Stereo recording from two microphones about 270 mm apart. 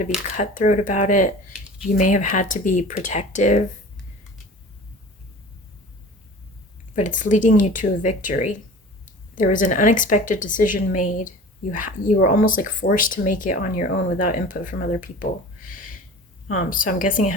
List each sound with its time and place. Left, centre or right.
0.3 s a woman's voice: left
6.9 s a woman's voice: left
16.5 s a woman's voice: left